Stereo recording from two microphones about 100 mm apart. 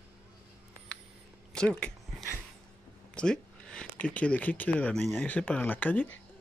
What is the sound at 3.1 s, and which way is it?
Speech, 10° left (ahead or behind).